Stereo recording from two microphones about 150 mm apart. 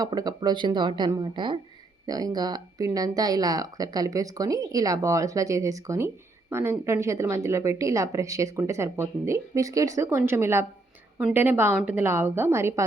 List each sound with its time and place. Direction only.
0.0 s a woman's voice: 25° right (ahead or behind)